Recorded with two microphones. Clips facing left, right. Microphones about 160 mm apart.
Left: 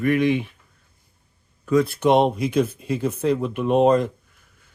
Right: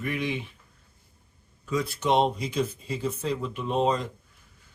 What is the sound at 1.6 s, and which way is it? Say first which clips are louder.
Speech: left 10 dB; 55° left (ahead or behind).